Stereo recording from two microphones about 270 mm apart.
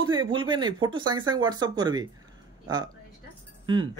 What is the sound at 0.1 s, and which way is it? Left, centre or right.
Speech, centre.